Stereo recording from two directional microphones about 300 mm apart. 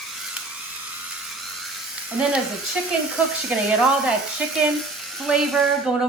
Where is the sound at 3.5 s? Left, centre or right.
Centre.